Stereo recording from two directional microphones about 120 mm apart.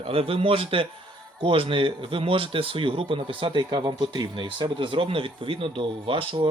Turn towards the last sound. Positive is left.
turn(degrees=-50)  # may be behind; listen again after turning